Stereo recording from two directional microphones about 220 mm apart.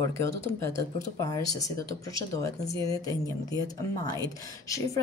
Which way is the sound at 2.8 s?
15° left (ahead or behind).